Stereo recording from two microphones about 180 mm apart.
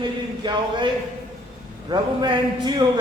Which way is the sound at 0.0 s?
25° right (ahead or behind).